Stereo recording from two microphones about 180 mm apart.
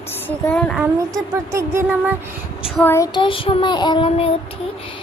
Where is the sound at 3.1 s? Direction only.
30° left (ahead or behind).